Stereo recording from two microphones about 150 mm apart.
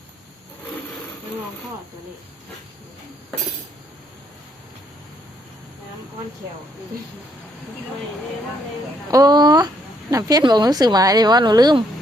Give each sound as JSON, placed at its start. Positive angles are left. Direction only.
{"t": 9.0, "sound": "speech", "side_deg": -25}